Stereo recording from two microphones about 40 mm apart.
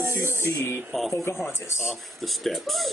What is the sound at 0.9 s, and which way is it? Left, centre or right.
Speech, centre.